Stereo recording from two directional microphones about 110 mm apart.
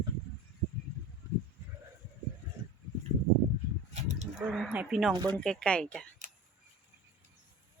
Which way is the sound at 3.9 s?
90° right.